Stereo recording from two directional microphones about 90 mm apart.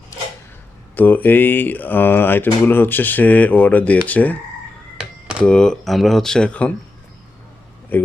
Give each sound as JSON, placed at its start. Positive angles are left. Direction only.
{"t": 0.9, "sound": "speech", "side_deg": 20}
{"t": 5.4, "sound": "speech", "side_deg": 10}
{"t": 7.9, "sound": "speech", "side_deg": 20}